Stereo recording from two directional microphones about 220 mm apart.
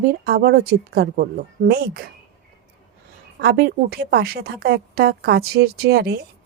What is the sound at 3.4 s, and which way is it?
A woman's voice, 45° right (ahead or behind).